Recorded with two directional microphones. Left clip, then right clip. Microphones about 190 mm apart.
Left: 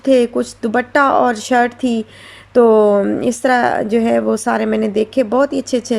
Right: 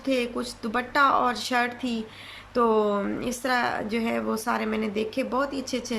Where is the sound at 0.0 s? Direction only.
40° left (ahead or behind).